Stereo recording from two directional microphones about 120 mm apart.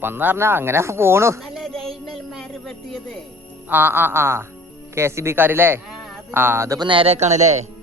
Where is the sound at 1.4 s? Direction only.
Centre (ahead or behind).